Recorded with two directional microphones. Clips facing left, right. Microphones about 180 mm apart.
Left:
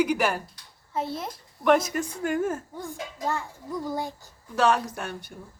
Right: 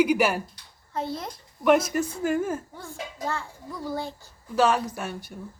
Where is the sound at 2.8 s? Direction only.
15° left (ahead or behind).